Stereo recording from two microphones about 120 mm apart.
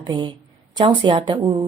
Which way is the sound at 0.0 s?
40° right (ahead or behind).